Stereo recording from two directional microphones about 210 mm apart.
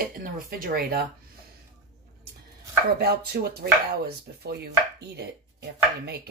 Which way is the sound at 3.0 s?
50° right (ahead or behind).